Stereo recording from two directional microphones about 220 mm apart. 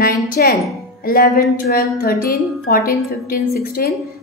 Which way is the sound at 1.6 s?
45° left (ahead or behind).